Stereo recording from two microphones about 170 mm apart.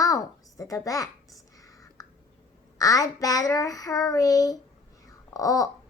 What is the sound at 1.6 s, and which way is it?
Whispering, 20° left (ahead or behind).